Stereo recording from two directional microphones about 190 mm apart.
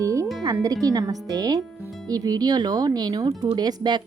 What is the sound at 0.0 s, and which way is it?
Music, 15° right (ahead or behind).